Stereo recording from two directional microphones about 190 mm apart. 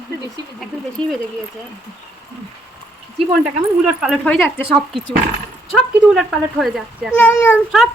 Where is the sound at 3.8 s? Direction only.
Centre (ahead or behind).